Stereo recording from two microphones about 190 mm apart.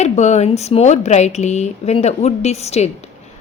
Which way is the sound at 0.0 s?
35° left (ahead or behind).